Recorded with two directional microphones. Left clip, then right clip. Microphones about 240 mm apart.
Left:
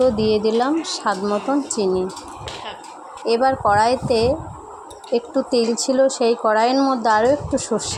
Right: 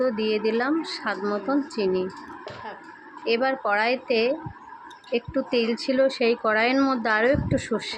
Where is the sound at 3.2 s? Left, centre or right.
Centre.